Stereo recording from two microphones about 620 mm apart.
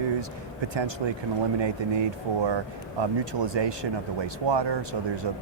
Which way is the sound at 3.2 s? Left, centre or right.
Right.